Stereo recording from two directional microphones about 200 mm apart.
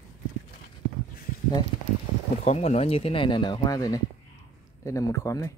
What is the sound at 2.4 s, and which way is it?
Speech, 30° left (ahead or behind).